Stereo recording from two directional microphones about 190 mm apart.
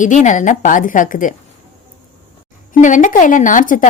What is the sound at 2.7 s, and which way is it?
Speech, 40° left (ahead or behind).